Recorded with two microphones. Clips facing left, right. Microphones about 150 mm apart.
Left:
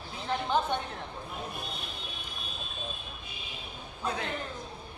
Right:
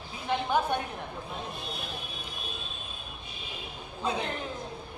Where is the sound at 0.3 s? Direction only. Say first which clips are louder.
Right 2 dB; 10° right (ahead or behind).